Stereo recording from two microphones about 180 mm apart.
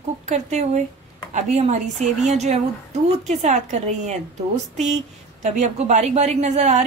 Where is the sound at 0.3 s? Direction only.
40° right (ahead or behind).